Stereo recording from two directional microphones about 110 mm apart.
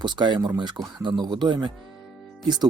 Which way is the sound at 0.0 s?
45° right (ahead or behind).